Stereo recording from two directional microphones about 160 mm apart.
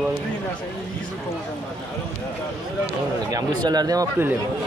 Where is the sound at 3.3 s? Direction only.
25° right (ahead or behind).